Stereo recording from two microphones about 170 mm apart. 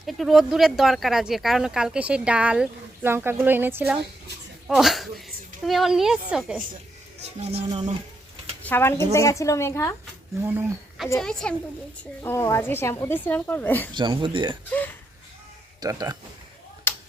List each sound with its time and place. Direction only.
0.0 s speech: centre (ahead or behind)
4.7 s speech: centre (ahead or behind)
7.3 s speech: 35° right (ahead or behind)
8.6 s speech: 15° left (ahead or behind)
10.4 s speech: 10° right (ahead or behind)
12.2 s speech: 15° left (ahead or behind)
13.9 s speech: 25° right (ahead or behind)
15.8 s speech: 20° right (ahead or behind)